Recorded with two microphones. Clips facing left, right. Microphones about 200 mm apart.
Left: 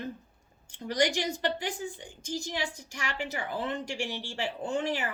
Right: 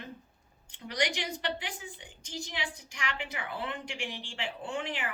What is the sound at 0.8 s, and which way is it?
A woman's voice, 45° left (ahead or behind).